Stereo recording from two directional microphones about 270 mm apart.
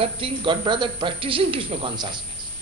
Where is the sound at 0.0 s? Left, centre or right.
Centre.